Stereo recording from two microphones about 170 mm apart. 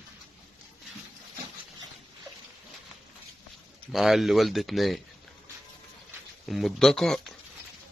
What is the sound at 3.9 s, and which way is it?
Speech, centre (ahead or behind).